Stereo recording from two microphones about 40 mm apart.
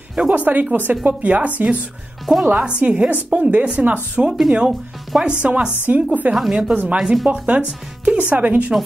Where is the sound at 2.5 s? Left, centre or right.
Right.